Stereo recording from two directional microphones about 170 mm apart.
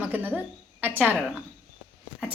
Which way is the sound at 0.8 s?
10° right (ahead or behind).